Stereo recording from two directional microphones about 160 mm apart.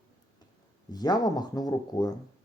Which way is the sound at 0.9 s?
25° left (ahead or behind).